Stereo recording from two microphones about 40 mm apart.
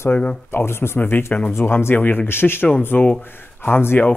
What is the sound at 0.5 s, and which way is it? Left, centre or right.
Speech, left.